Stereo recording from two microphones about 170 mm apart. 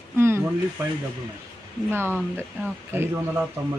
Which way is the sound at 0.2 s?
15° right (ahead or behind).